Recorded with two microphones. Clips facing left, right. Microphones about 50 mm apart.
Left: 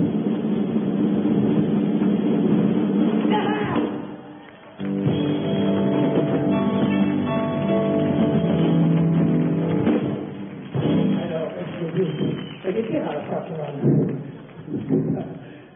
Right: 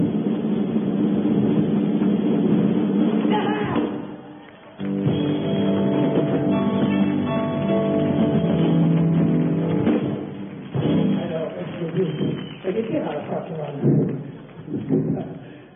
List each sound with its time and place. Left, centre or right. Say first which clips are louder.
0.3 s vehicle: even; centre
2.2 s a sound: even; centre
4.8 s music: even; centre